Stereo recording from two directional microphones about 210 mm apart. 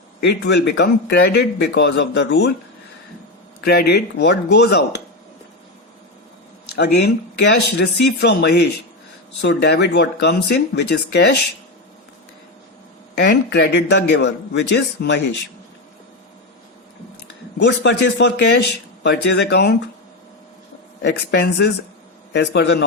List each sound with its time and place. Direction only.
0.2 s speech: 55° left (ahead or behind)
3.6 s speech: 50° left (ahead or behind)
6.7 s speech: 50° left (ahead or behind)
13.1 s a man's voice: 50° left (ahead or behind)
17.6 s a man's voice: 55° left (ahead or behind)
21.0 s a man's voice: 55° left (ahead or behind)